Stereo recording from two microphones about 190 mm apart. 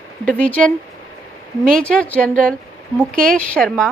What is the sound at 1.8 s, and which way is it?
Speech, 5° left (ahead or behind).